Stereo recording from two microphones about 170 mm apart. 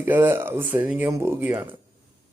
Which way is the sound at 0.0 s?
10° right (ahead or behind).